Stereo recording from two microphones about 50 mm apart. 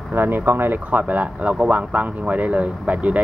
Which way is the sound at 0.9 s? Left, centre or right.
Right.